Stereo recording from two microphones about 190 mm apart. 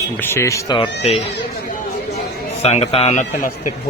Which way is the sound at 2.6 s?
35° left (ahead or behind).